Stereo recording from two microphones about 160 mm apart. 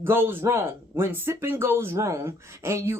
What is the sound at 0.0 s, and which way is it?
Speech, 15° right (ahead or behind).